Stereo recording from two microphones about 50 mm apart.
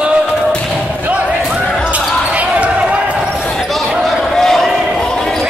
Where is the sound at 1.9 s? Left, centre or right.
Right.